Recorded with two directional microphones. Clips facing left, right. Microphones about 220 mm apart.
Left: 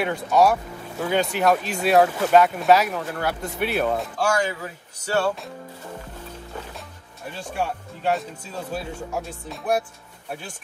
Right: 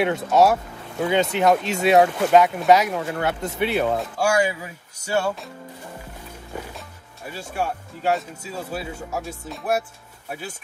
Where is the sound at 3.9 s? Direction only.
Centre (ahead or behind).